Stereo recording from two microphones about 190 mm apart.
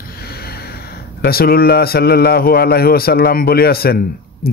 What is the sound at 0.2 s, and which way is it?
Speech, 55° left (ahead or behind).